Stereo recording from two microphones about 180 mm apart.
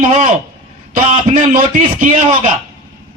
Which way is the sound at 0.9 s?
35° right (ahead or behind).